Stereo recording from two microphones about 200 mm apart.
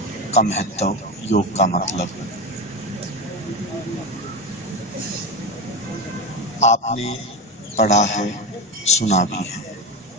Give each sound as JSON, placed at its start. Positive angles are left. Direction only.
{"t": 0.3, "sound": "speech", "side_deg": 35}
{"t": 6.6, "sound": "speech", "side_deg": 35}